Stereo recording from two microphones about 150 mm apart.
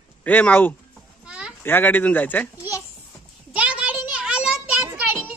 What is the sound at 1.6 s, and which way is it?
Speech, 15° left (ahead or behind).